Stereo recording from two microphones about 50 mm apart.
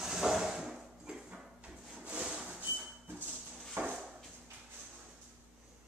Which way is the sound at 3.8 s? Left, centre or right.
Right.